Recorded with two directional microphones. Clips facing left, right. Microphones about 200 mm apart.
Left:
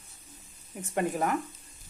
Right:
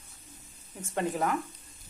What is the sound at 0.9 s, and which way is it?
Speech, 15° left (ahead or behind).